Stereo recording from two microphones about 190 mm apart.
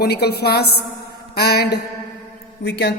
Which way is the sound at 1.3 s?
60° left (ahead or behind).